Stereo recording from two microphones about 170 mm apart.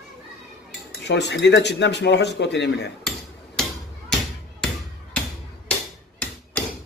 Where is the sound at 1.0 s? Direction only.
90° left.